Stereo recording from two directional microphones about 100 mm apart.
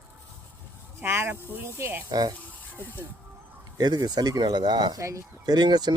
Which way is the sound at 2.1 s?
40° right (ahead or behind).